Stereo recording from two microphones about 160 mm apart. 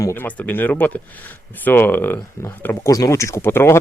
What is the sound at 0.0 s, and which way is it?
Speech, 15° left (ahead or behind).